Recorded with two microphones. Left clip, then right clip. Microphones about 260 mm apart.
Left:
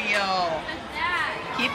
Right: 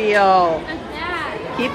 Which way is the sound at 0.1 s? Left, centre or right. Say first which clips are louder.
Right 11 dB; centre.